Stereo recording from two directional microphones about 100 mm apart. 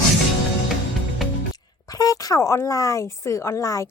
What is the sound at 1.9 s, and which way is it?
Speech, 35° left (ahead or behind).